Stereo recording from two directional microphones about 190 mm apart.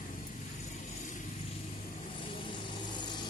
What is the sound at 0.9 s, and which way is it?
Vehicle, 40° left (ahead or behind).